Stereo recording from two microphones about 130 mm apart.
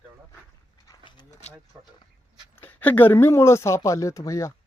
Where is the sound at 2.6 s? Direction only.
15° left (ahead or behind).